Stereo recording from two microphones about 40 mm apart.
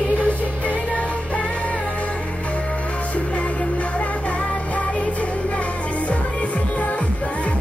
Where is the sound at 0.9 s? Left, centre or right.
Left.